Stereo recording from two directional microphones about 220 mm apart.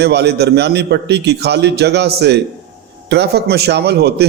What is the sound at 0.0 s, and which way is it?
A man's voice, 50° right (ahead or behind).